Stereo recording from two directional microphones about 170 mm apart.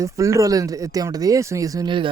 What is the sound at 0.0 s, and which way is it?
Speech, 20° right (ahead or behind).